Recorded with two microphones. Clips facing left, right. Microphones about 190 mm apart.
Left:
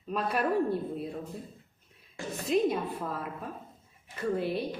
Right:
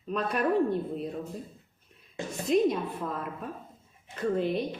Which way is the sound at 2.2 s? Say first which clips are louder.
Right 2 dB; 20° right (ahead or behind).